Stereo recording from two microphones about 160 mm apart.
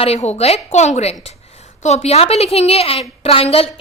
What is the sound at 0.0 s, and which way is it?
A woman's voice, 40° left (ahead or behind).